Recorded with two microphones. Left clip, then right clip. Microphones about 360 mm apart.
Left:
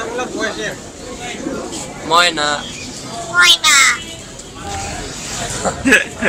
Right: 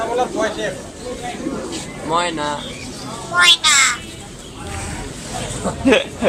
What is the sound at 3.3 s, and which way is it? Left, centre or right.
Speech, centre.